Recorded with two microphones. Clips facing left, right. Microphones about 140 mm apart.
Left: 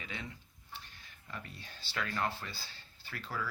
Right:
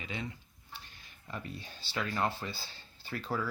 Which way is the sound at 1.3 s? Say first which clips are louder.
Right 5 dB; 20° right (ahead or behind).